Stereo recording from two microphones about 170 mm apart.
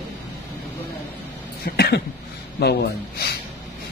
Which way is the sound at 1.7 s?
70° left (ahead or behind).